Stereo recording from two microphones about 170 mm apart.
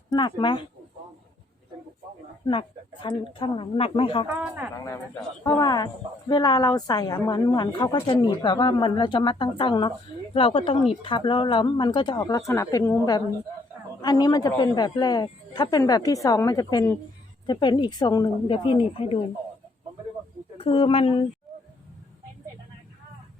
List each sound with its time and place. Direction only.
0.1 s speech: 25° left (ahead or behind)
2.5 s a woman's voice: 30° left (ahead or behind)
4.4 s speech: 10° right (ahead or behind)
5.4 s a woman's voice: 20° left (ahead or behind)
20.6 s a woman's voice: 35° left (ahead or behind)
21.5 s a sound: centre (ahead or behind)